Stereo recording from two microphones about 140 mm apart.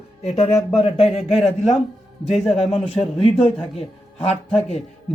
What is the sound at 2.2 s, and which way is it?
A man's voice, 45° left (ahead or behind).